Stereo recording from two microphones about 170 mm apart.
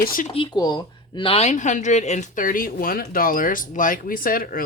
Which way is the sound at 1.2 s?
35° left (ahead or behind).